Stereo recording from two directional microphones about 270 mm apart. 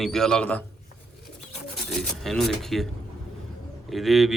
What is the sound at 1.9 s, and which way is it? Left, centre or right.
Speech, centre.